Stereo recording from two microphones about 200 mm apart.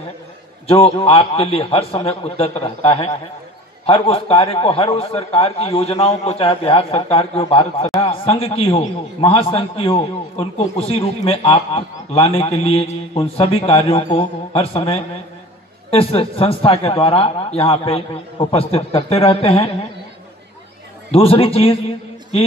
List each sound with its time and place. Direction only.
0.7 s a man's voice: 30° left (ahead or behind)
21.1 s a man's voice: 30° left (ahead or behind)